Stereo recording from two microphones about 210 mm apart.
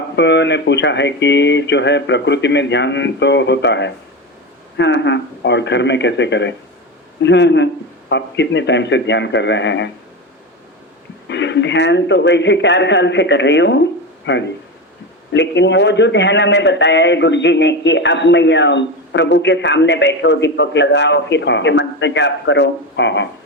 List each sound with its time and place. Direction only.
0.2 s a man's voice: 55° left (ahead or behind)
11.3 s a man's voice: 55° left (ahead or behind)